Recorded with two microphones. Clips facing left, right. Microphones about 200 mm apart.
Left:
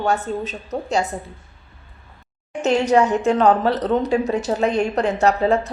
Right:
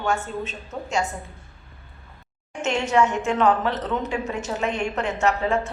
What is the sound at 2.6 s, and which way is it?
A woman's voice, 35° left (ahead or behind).